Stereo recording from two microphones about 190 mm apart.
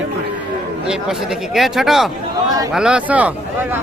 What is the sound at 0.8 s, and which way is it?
Speech, 5° right (ahead or behind).